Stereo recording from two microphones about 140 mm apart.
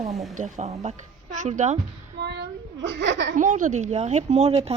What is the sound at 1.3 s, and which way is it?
Speech, 65° right (ahead or behind).